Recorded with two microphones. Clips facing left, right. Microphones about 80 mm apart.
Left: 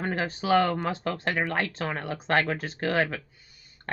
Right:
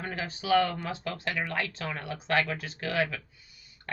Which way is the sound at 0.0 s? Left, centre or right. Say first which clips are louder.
Left 6 dB; left.